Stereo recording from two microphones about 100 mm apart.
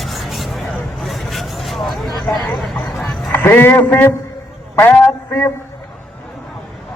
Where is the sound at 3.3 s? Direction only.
20° left (ahead or behind).